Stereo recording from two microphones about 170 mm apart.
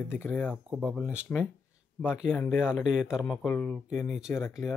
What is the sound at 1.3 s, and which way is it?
Speech, 10° left (ahead or behind).